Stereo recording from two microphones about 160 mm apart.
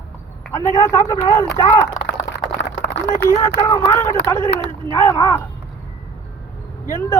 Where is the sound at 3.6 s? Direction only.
15° left (ahead or behind).